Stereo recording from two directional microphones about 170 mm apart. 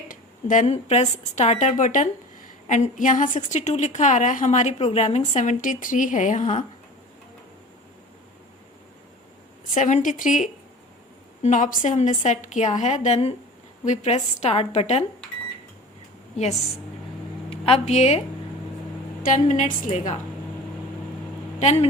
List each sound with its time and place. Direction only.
0.1 s a woman's voice: 50° left (ahead or behind)
9.7 s a woman's voice: 50° left (ahead or behind)
17.5 s a woman's voice: 35° left (ahead or behind)
19.2 s a woman's voice: 45° left (ahead or behind)
21.6 s a woman's voice: 40° left (ahead or behind)